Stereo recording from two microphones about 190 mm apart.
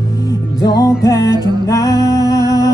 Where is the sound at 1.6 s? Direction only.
20° left (ahead or behind).